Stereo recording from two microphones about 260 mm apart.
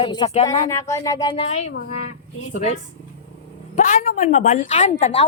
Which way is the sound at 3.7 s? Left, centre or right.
Left.